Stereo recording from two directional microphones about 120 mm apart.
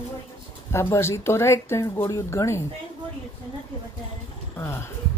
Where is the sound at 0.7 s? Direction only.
20° left (ahead or behind).